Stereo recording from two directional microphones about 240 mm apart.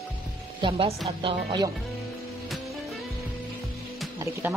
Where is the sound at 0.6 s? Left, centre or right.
Right.